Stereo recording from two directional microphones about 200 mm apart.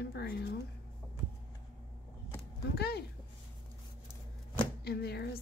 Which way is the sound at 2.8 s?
55° left (ahead or behind).